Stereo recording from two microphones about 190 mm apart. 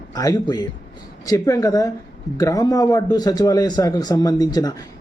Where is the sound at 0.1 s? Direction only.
20° left (ahead or behind).